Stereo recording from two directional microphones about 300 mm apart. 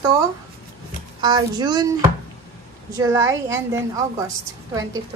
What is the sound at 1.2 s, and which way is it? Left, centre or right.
Speech, centre.